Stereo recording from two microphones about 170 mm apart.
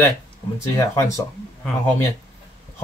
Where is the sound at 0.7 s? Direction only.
15° left (ahead or behind).